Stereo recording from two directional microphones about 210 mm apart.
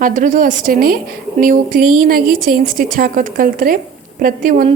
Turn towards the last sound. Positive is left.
turn(degrees=-40)  # may be behind; listen again after turning